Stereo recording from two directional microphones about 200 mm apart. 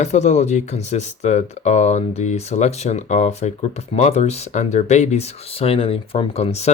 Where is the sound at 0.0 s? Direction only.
35° left (ahead or behind).